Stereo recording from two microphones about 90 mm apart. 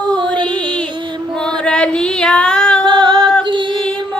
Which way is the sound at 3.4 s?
65° right (ahead or behind).